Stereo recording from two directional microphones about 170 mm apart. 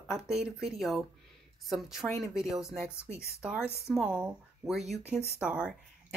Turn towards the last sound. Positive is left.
turn(degrees=-5)  # may be behind; listen again after turning